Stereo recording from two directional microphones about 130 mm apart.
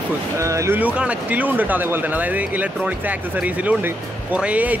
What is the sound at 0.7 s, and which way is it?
Speech, 10° right (ahead or behind).